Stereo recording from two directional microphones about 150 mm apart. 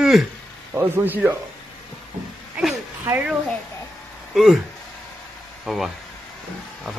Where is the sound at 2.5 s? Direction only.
10° right (ahead or behind).